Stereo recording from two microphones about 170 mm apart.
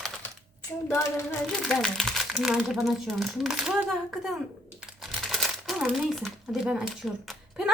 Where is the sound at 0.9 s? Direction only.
15° left (ahead or behind).